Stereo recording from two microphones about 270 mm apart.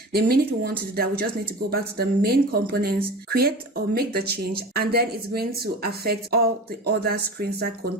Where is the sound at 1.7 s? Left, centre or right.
Right.